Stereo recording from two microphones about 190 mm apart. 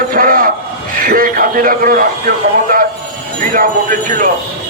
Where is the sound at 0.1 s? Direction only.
50° right (ahead or behind).